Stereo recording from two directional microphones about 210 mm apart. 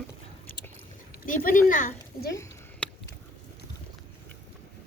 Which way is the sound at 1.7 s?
40° left (ahead or behind).